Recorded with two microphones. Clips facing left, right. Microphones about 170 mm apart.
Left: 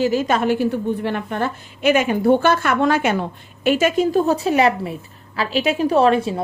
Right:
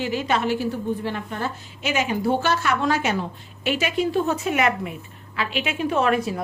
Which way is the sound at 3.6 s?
45° left (ahead or behind).